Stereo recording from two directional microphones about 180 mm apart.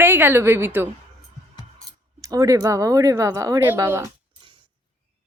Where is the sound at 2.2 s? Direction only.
20° right (ahead or behind).